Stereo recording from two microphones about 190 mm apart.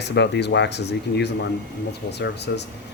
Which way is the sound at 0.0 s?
65° left (ahead or behind).